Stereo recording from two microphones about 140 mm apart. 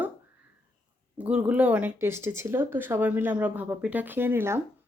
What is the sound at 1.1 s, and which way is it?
A woman's voice, 10° right (ahead or behind).